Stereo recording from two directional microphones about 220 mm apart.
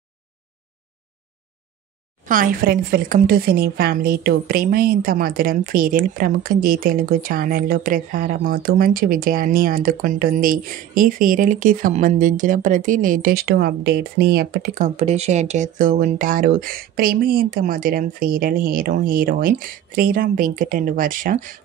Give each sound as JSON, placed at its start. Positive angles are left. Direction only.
{"t": 2.2, "sound": "speech", "side_deg": -40}